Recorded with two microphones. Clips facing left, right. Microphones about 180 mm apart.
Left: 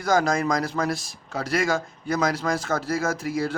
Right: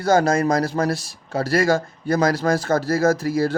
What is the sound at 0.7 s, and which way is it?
Speech, 40° right (ahead or behind).